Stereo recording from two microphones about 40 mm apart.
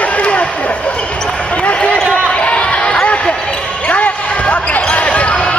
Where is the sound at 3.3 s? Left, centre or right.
Centre.